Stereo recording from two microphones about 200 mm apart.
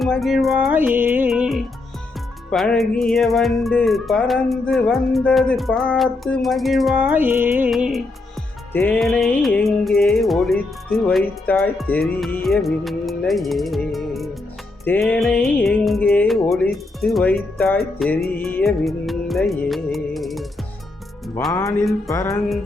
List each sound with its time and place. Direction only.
0.0 s music: centre (ahead or behind)
11.4 s speech: 5° left (ahead or behind)
12.2 s music: centre (ahead or behind)
21.4 s speech: 10° left (ahead or behind)